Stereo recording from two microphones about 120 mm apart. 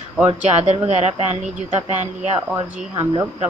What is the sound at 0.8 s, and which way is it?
Speech, 60° right (ahead or behind).